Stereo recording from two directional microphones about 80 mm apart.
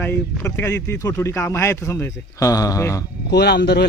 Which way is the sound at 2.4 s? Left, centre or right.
Left.